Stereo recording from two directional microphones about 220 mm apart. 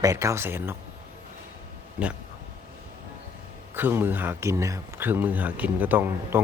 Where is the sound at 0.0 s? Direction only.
15° right (ahead or behind).